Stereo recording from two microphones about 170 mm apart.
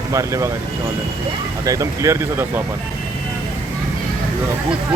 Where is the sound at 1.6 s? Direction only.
20° right (ahead or behind).